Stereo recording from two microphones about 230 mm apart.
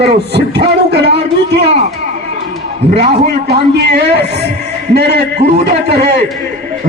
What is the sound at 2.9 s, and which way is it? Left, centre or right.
A man's voice, right.